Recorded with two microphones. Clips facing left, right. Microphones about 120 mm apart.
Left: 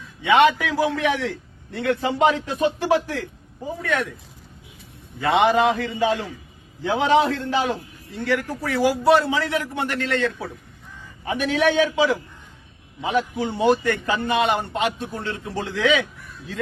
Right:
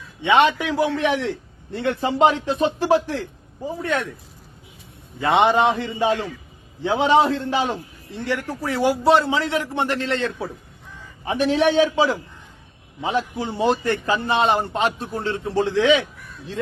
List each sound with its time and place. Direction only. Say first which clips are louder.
0.2 s a man's voice: left 1 dB; 25° right (ahead or behind)
5.2 s a man's voice: right 1 dB; 25° right (ahead or behind)
13.0 s a man's voice: left 1 dB; 30° right (ahead or behind)